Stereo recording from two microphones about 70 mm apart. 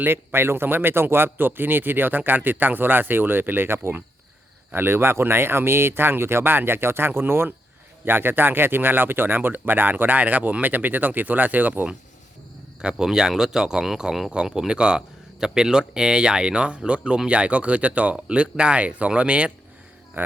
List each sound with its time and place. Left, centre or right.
0.0 s speech: right
12.8 s speech: centre
20.2 s speech: right